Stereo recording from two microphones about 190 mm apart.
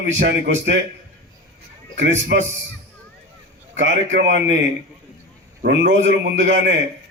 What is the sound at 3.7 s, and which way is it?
Speech, 75° right (ahead or behind).